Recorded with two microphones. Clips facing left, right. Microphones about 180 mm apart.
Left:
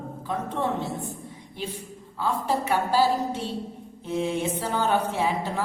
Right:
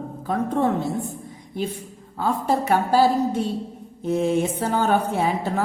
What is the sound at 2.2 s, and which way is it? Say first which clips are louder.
A woman's voice: right 4 dB; 45° right (ahead or behind).